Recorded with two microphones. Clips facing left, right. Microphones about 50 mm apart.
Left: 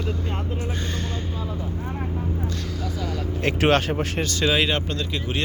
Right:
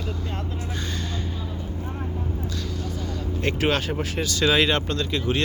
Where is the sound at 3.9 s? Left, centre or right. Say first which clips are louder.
Left 2 dB; left.